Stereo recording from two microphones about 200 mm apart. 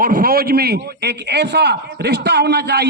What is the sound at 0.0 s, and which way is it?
A man's voice, 45° right (ahead or behind).